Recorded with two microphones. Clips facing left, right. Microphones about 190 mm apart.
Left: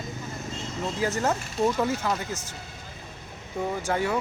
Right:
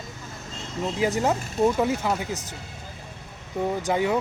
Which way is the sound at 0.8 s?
15° right (ahead or behind).